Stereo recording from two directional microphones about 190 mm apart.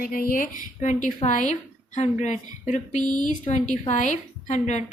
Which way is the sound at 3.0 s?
20° right (ahead or behind).